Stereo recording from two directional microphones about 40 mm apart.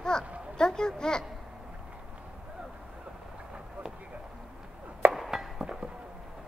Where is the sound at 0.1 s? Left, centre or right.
Centre.